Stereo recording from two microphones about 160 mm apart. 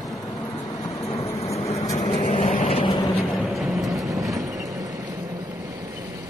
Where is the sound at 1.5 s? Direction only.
40° left (ahead or behind).